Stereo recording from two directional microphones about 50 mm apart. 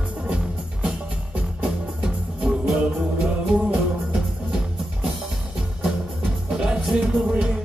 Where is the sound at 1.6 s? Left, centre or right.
Centre.